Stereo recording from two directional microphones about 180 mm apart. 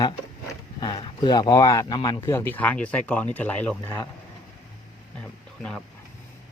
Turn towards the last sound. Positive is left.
turn(degrees=5)  # may be behind; listen again after turning